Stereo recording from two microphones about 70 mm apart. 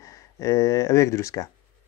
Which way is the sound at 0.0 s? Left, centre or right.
Left.